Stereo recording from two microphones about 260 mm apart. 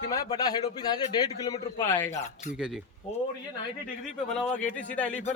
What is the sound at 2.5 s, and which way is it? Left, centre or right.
Speech, centre.